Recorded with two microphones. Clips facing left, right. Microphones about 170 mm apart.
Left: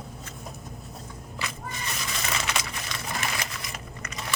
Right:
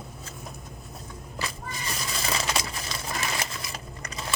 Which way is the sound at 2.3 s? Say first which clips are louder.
Right 2 dB; 35° right (ahead or behind).